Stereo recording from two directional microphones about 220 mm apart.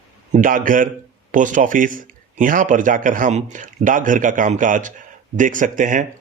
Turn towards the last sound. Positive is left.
turn(degrees=-35)  # may be behind; listen again after turning